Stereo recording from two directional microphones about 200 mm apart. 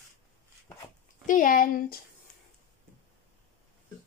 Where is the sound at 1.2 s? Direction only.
40° left (ahead or behind).